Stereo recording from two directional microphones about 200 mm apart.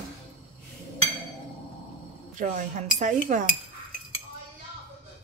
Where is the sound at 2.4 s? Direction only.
40° right (ahead or behind).